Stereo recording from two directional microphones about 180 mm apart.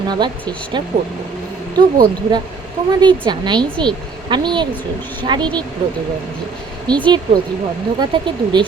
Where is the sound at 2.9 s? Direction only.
25° right (ahead or behind).